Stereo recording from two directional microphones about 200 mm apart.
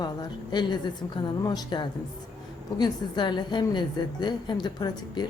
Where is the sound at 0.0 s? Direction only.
20° left (ahead or behind).